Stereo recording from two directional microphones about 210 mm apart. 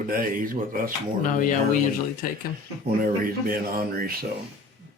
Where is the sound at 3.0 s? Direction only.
45° right (ahead or behind).